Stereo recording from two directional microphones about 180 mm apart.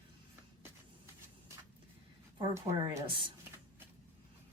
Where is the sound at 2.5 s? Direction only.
15° right (ahead or behind).